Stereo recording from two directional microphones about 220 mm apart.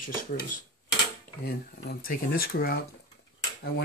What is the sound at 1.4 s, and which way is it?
Speech, 45° left (ahead or behind).